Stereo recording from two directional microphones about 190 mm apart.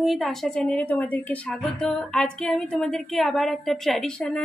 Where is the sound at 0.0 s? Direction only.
Centre (ahead or behind).